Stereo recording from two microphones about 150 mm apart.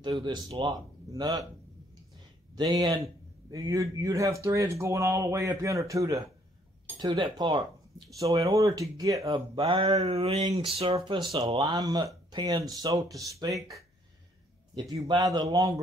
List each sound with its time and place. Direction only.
0.0 s speech: 30° right (ahead or behind)
2.5 s speech: 25° right (ahead or behind)
7.1 s a sound: 35° right (ahead or behind)
8.2 s speech: 20° right (ahead or behind)
9.6 s a sound: 35° right (ahead or behind)
11.3 s speech: 35° right (ahead or behind)
14.8 s speech: 25° right (ahead or behind)